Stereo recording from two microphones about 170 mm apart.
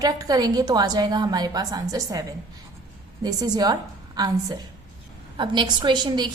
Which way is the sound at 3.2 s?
25° right (ahead or behind).